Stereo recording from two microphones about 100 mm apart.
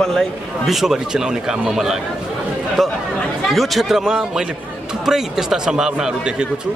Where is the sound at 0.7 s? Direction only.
5° right (ahead or behind).